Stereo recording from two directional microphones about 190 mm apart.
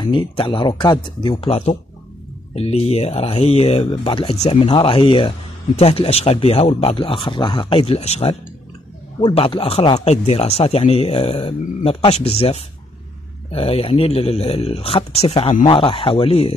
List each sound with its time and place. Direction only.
0.0 s speech: 25° left (ahead or behind)